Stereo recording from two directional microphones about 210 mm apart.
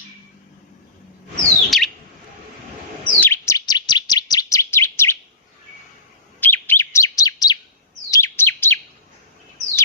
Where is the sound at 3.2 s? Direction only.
10° left (ahead or behind).